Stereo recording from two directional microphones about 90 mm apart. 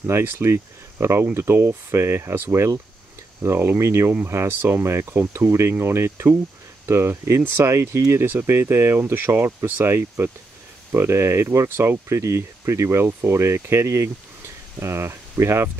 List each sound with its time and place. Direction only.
0.0 s speech: 25° right (ahead or behind)